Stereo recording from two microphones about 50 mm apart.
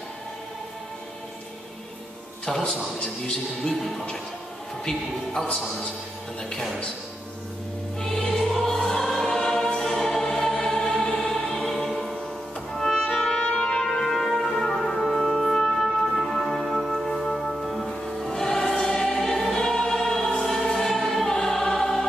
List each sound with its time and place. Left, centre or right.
2.4 s a man's voice: centre
4.8 s a man's voice: centre
8.3 s music: centre
8.7 s choir: centre
11.1 s music: centre
12.7 s music: centre
13.8 s music: centre
18.3 s choir: centre
20.0 s music: centre